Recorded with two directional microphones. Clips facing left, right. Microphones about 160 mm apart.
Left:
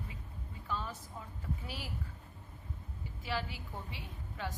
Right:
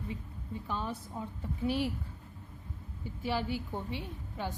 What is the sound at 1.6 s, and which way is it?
Speech, 30° right (ahead or behind).